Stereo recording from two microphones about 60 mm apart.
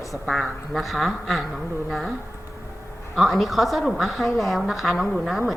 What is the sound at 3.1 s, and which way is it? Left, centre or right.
A woman's voice, centre.